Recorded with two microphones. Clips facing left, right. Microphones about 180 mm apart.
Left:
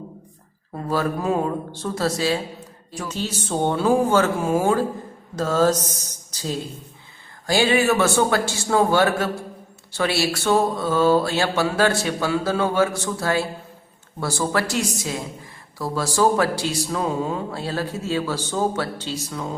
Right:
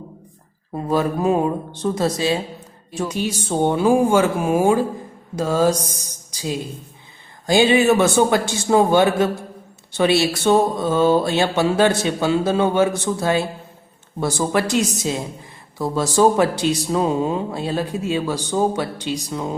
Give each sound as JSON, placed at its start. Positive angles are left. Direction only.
{"t": 0.7, "sound": "speech", "side_deg": -20}